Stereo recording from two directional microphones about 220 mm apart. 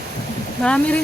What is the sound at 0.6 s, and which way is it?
Speech, 5° left (ahead or behind).